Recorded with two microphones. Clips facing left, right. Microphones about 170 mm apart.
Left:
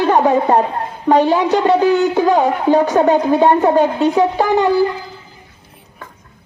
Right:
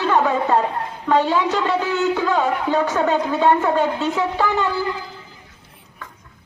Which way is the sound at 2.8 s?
35° left (ahead or behind).